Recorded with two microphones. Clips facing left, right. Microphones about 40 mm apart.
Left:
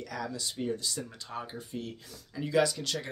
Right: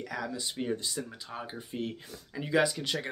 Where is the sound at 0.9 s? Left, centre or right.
Centre.